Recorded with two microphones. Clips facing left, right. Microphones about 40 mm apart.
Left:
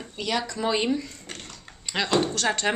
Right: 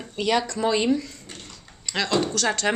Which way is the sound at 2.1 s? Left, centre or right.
Centre.